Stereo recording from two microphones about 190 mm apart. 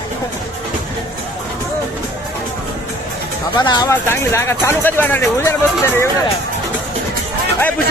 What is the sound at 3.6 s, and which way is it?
Speech, 20° left (ahead or behind).